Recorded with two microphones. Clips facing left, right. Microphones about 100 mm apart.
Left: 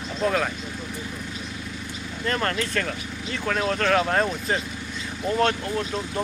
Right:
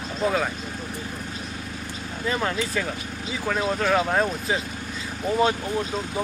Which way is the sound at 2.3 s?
5° right (ahead or behind).